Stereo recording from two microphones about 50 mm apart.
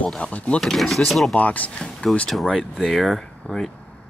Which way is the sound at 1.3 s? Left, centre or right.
Left.